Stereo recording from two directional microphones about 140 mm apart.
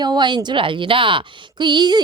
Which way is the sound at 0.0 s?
30° right (ahead or behind).